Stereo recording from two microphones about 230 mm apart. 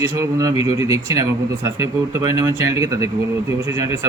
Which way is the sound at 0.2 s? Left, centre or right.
Centre.